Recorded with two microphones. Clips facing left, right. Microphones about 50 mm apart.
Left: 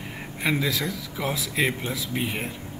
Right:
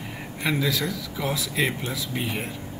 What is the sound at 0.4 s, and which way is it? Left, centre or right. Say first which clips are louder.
Speech: even; centre.